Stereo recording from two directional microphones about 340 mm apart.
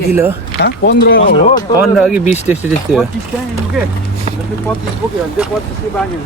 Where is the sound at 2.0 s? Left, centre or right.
Centre.